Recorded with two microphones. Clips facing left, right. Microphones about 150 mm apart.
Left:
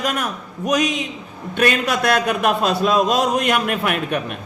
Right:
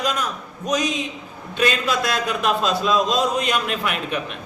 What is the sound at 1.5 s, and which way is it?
A man's voice, 60° left (ahead or behind).